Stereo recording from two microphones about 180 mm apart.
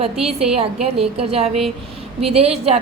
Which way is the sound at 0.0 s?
35° right (ahead or behind).